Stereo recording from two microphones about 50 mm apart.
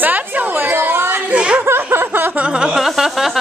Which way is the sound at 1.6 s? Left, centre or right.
Right.